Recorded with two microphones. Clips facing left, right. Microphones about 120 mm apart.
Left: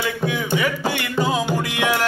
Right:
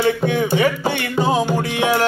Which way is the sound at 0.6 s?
25° right (ahead or behind).